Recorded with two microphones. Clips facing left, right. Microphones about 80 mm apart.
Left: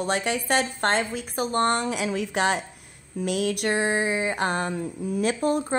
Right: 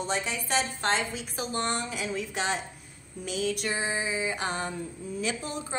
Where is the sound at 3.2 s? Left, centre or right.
Left.